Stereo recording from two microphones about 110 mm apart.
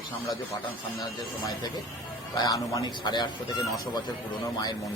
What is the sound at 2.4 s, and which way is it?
Speech, 30° left (ahead or behind).